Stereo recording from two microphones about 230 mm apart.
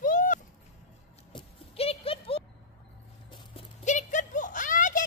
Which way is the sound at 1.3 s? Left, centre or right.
Left.